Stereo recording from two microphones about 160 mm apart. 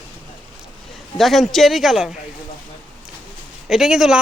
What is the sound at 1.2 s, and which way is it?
Speech, centre (ahead or behind).